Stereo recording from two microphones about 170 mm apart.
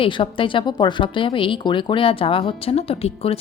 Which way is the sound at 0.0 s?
30° left (ahead or behind).